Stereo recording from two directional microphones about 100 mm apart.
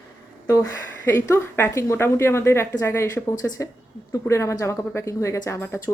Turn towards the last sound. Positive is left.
turn(degrees=25)  # may be behind; listen again after turning